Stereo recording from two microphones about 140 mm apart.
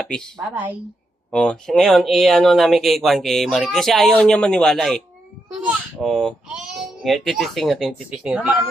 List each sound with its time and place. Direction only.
0.0 s speech: 5° left (ahead or behind)
1.3 s speech: 5° left (ahead or behind)